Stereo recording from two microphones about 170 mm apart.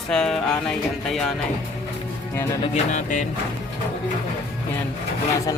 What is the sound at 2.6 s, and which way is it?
Music, 40° left (ahead or behind).